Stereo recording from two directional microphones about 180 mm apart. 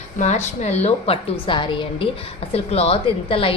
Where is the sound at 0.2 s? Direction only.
40° left (ahead or behind).